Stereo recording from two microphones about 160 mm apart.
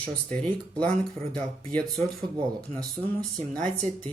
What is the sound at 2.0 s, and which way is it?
Speech, 30° right (ahead or behind).